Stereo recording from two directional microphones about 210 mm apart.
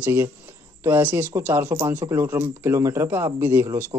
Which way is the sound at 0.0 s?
10° right (ahead or behind).